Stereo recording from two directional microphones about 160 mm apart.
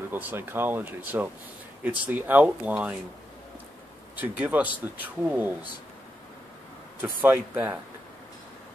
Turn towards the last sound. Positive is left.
turn(degrees=-10)  # may be behind; listen again after turning